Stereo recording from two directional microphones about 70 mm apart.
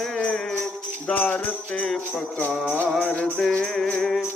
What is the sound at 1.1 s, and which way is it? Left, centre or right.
Music, left.